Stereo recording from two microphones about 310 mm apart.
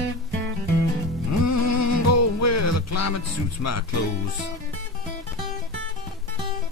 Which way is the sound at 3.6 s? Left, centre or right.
Left.